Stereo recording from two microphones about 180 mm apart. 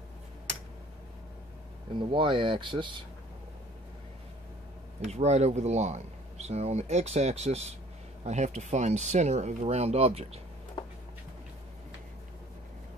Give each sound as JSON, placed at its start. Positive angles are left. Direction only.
{"t": 2.0, "sound": "speech", "side_deg": -30}
{"t": 5.0, "sound": "speech", "side_deg": -35}
{"t": 10.8, "sound": "a sound", "side_deg": 30}